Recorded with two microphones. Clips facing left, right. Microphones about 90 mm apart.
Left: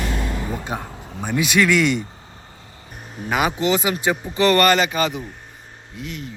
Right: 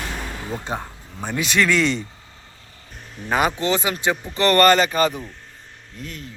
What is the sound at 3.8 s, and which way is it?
Speech, 15° left (ahead or behind).